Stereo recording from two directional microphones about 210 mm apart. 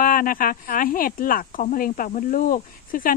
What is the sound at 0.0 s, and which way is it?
Speech, 40° left (ahead or behind).